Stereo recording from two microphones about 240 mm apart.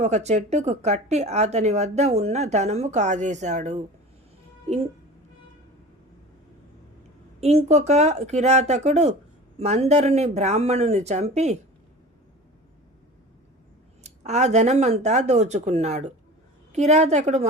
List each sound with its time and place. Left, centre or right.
0.0 s speech: right
7.4 s speech: right
14.0 s speech: right